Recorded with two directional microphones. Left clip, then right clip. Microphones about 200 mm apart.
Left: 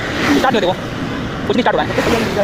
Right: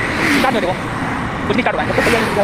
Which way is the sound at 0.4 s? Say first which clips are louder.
Left 2 dB; 30° left (ahead or behind).